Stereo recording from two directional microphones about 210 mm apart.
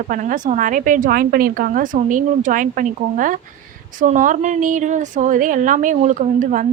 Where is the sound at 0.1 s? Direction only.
40° right (ahead or behind).